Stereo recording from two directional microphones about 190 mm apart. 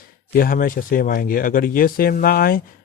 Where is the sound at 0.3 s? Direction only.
50° left (ahead or behind).